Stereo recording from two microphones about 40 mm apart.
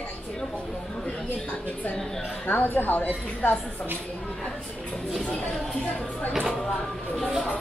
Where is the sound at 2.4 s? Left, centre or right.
Left.